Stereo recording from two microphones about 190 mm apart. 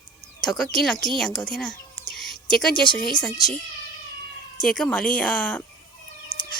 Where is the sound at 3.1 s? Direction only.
5° left (ahead or behind).